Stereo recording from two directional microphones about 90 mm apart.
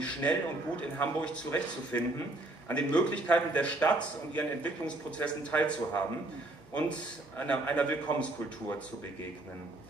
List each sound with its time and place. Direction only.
0.0 s speech: 15° left (ahead or behind)
7.3 s speech: 15° left (ahead or behind)